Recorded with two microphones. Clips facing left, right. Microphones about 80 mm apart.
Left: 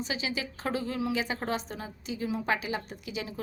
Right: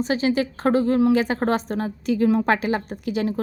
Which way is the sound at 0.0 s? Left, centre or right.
Right.